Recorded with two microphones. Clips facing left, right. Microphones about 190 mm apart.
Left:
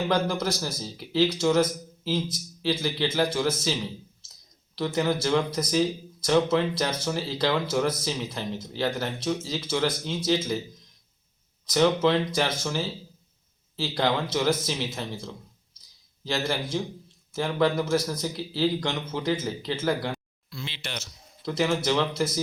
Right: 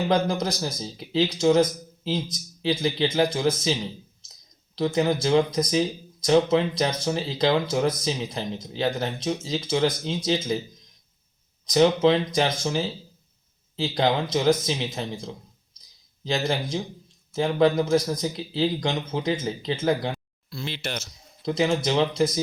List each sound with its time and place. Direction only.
0.1 s speech: 15° right (ahead or behind)
11.6 s speech: 20° right (ahead or behind)
20.5 s speech: 40° right (ahead or behind)
21.4 s speech: 20° right (ahead or behind)